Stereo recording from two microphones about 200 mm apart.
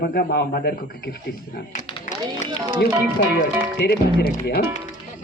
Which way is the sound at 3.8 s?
55° left (ahead or behind).